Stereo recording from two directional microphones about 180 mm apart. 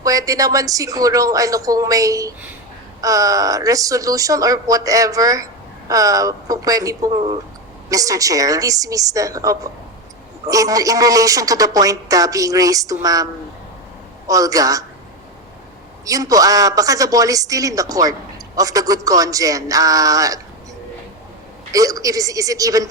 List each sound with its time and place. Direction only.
0.0 s speech: 20° right (ahead or behind)
14.3 s speech: 20° right (ahead or behind)
16.0 s speech: 20° right (ahead or behind)
21.7 s speech: 20° right (ahead or behind)